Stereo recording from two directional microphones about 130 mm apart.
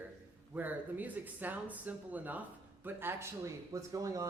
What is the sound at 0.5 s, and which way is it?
Speech, 15° right (ahead or behind).